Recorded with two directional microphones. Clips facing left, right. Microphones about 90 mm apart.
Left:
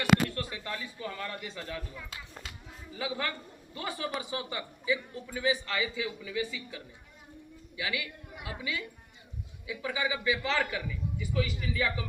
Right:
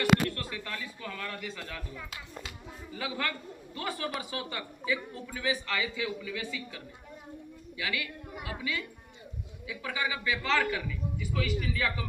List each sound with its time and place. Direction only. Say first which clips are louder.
0.3 s speech: even; 20° left (ahead or behind)
2.9 s a man's voice: even; 15° left (ahead or behind)
7.8 s a man's voice: even; 15° left (ahead or behind)